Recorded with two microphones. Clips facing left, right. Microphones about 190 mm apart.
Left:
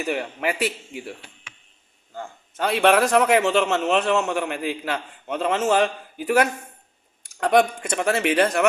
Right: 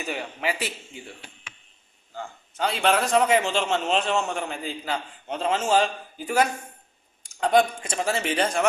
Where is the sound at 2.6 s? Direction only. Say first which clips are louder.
Left 5 dB; 60° left (ahead or behind).